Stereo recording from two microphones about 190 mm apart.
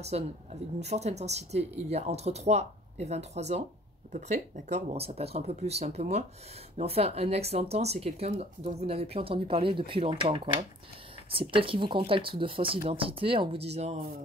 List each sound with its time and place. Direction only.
0.0 s speech: 35° right (ahead or behind)